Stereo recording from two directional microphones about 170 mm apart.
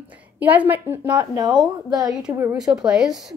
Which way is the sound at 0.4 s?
10° right (ahead or behind).